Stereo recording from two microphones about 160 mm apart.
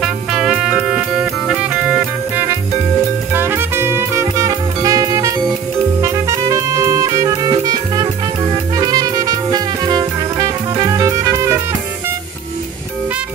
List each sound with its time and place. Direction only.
0.0 s music: 5° right (ahead or behind)